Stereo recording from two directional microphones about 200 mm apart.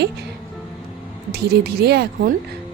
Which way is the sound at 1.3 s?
55° right (ahead or behind).